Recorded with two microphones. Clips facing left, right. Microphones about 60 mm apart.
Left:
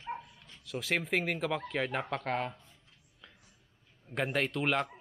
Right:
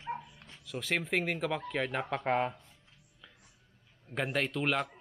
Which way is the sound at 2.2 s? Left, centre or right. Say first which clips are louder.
Right 4 dB; centre.